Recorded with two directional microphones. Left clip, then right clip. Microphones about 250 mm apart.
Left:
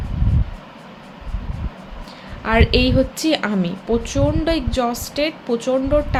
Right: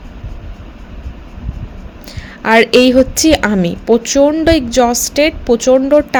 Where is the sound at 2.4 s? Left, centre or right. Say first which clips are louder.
Right 9 dB; right.